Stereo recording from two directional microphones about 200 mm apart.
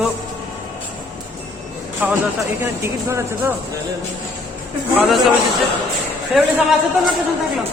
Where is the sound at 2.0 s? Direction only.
5° right (ahead or behind).